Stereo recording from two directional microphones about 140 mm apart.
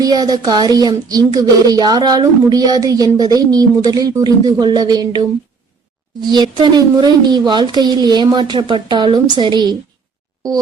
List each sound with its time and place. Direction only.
0.0 s speech: 30° right (ahead or behind)
6.2 s speech: 30° right (ahead or behind)